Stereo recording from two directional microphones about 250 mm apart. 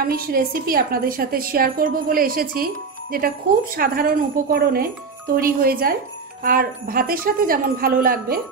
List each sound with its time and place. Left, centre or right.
0.0 s a woman's voice: right